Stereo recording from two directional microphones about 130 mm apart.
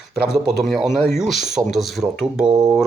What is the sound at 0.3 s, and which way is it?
Speech, centre (ahead or behind).